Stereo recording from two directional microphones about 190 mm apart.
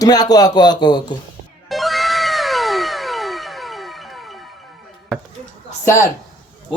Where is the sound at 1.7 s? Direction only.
Centre (ahead or behind).